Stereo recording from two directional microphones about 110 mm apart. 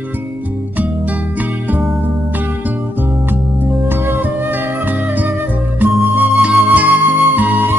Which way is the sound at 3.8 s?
20° right (ahead or behind).